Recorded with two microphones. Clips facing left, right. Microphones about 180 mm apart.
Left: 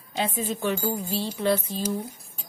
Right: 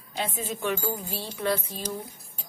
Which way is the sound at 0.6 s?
30° left (ahead or behind).